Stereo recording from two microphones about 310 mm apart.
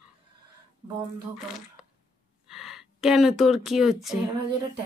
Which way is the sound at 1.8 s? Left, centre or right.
Centre.